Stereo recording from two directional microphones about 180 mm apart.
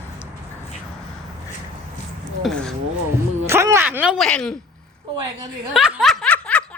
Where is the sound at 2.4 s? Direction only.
5° left (ahead or behind).